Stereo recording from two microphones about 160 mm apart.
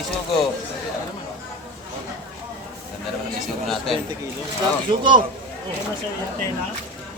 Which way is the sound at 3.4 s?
Centre (ahead or behind).